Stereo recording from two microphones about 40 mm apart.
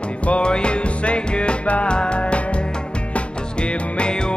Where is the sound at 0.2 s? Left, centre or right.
Left.